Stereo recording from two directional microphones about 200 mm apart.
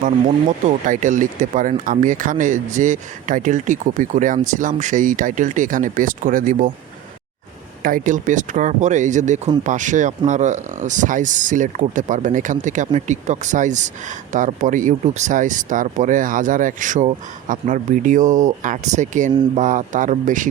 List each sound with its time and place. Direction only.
0.9 s speech: 40° right (ahead or behind)
7.8 s speech: 45° right (ahead or behind)